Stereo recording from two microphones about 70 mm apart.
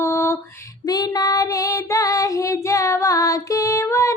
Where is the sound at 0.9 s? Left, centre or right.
Left.